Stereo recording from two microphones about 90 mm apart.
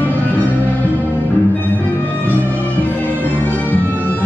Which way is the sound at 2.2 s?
20° left (ahead or behind).